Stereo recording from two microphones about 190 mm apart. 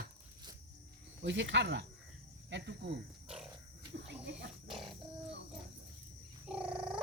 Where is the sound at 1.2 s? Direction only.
70° right (ahead or behind).